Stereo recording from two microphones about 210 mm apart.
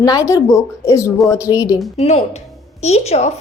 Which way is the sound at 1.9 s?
30° left (ahead or behind).